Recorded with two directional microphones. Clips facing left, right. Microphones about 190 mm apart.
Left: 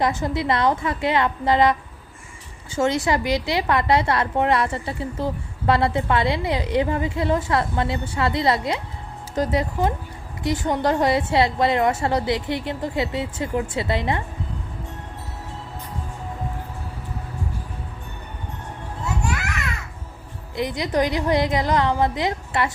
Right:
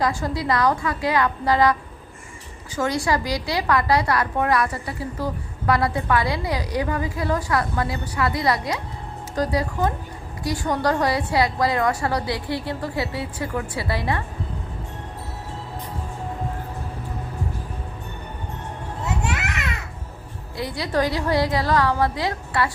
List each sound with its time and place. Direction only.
0.0 s a woman's voice: 20° left (ahead or behind)
2.7 s a woman's voice: 25° left (ahead or behind)
19.2 s children playing: 20° right (ahead or behind)
20.6 s a woman's voice: 20° left (ahead or behind)